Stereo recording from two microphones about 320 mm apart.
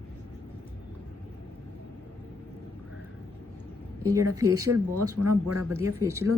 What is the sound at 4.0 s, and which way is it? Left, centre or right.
Speech, centre.